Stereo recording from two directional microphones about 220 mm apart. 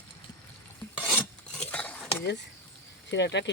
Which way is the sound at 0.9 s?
Centre (ahead or behind).